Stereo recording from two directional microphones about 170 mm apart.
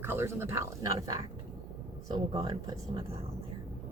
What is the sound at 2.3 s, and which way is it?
Speech, 25° right (ahead or behind).